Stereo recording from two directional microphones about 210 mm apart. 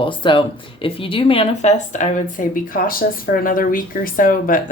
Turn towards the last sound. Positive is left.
turn(degrees=40)  # may be behind; listen again after turning